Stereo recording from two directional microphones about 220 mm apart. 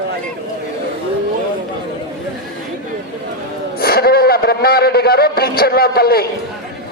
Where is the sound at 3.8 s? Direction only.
45° left (ahead or behind).